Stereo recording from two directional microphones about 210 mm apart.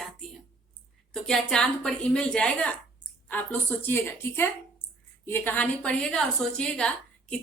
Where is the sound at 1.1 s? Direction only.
5° left (ahead or behind).